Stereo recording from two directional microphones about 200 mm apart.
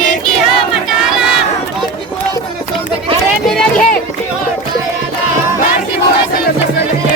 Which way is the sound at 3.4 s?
5° left (ahead or behind).